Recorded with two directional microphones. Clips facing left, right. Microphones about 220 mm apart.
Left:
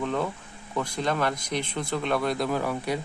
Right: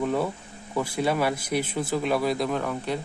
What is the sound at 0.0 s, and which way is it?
Speech, 10° right (ahead or behind).